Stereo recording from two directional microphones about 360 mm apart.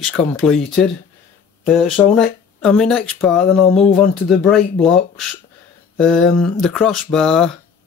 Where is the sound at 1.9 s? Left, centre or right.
Centre.